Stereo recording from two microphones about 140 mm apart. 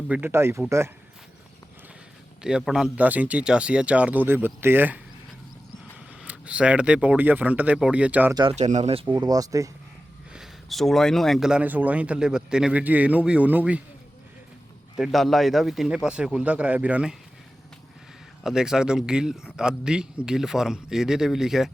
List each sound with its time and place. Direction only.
0.1 s speech: 15° right (ahead or behind)
2.4 s speech: 5° right (ahead or behind)
6.2 s speech: 10° right (ahead or behind)
8.5 s speech: 55° right (ahead or behind)
9.1 s speech: 25° right (ahead or behind)
10.3 s speech: centre (ahead or behind)
14.9 s speech: centre (ahead or behind)
18.4 s speech: 5° right (ahead or behind)